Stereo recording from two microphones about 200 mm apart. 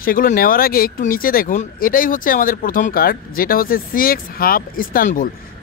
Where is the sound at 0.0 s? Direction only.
45° left (ahead or behind).